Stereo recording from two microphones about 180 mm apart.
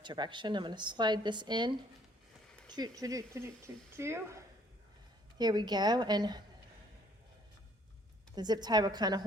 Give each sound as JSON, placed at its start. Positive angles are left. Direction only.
{"t": 0.0, "sound": "a woman's voice", "side_deg": -25}
{"t": 8.4, "sound": "a woman's voice", "side_deg": -25}